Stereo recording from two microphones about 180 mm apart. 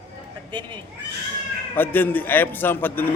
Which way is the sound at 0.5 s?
25° right (ahead or behind).